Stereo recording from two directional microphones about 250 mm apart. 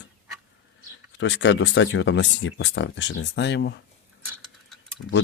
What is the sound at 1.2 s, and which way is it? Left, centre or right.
Speech, left.